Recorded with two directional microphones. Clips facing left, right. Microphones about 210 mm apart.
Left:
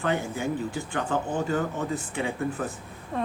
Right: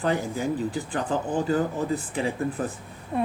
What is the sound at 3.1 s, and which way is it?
Speech, 15° right (ahead or behind).